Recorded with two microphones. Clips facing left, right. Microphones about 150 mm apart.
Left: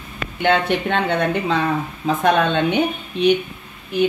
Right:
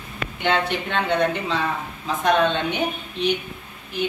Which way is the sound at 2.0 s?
55° left (ahead or behind).